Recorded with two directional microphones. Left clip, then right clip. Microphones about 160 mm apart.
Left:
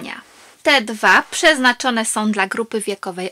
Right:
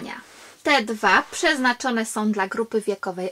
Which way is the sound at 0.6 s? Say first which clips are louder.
Left 5 dB; 15° left (ahead or behind).